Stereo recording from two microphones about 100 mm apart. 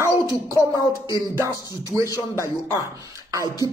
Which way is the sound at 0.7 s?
45° left (ahead or behind).